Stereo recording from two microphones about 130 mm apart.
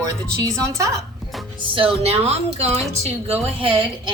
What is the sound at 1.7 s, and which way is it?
A woman's voice, 45° right (ahead or behind).